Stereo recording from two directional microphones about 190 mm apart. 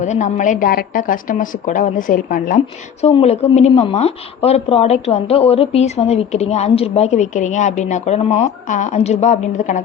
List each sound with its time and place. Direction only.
0.0 s a woman's voice: 40° left (ahead or behind)
3.0 s speech: 35° left (ahead or behind)